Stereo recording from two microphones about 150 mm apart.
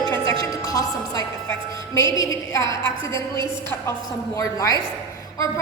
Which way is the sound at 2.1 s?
20° left (ahead or behind).